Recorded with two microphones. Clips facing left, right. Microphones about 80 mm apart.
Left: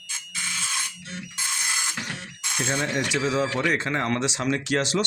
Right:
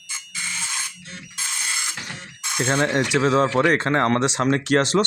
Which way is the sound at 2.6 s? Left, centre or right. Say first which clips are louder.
Right 6 dB; right.